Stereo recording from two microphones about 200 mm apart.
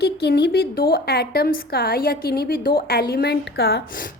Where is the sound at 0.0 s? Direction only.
55° left (ahead or behind).